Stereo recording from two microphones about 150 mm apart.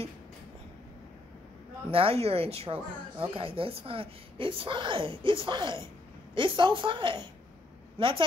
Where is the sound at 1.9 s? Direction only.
40° right (ahead or behind).